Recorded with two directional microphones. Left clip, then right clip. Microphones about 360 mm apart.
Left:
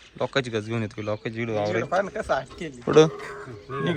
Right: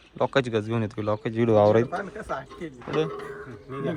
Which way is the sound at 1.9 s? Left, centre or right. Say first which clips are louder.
Left 7 dB; left.